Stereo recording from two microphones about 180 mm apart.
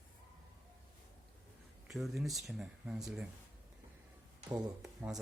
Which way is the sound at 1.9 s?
Centre (ahead or behind).